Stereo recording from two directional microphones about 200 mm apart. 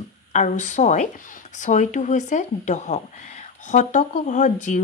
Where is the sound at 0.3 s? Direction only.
40° left (ahead or behind).